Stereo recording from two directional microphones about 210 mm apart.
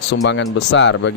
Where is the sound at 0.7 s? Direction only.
60° left (ahead or behind).